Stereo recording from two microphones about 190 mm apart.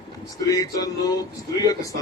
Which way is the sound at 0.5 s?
20° left (ahead or behind).